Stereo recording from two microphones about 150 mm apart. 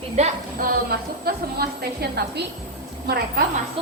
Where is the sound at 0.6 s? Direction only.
90° right.